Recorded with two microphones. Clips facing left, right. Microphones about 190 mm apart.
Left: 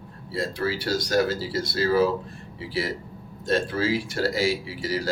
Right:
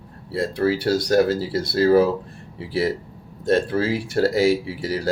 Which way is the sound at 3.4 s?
55° right (ahead or behind).